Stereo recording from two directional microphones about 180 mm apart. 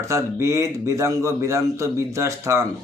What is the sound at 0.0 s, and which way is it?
A man's voice, 15° right (ahead or behind).